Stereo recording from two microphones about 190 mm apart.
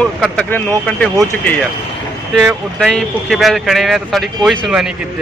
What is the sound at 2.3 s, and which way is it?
Speech, centre (ahead or behind).